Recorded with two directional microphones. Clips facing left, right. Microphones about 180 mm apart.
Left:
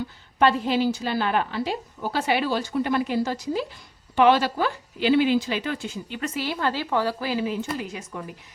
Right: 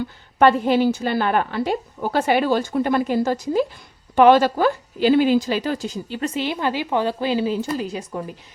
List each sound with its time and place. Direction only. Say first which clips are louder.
0.3 s a woman's voice: right 5 dB; 55° right (ahead or behind); by 6.4 s 35° right (ahead or behind)
6.4 s speech: right 1 dB; 20° right (ahead or behind)